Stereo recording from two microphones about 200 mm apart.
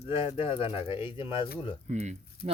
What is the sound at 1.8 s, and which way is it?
Speech, 35° right (ahead or behind).